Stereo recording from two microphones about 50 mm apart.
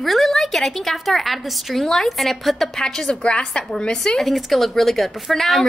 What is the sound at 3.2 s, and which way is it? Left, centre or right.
Speech, centre.